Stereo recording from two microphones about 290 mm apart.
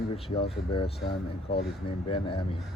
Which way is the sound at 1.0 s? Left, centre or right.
Left.